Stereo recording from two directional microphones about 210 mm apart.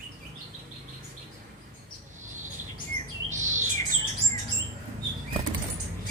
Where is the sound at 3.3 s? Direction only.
35° right (ahead or behind).